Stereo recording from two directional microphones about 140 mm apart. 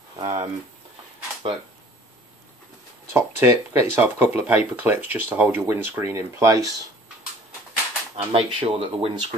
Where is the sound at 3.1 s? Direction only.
15° right (ahead or behind).